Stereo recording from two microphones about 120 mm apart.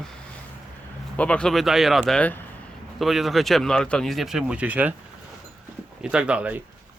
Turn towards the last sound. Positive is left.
turn(degrees=-10)  # may be behind; listen again after turning